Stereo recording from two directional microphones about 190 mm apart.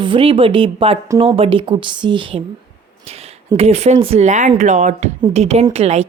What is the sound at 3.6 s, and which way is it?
Speech, 35° right (ahead or behind).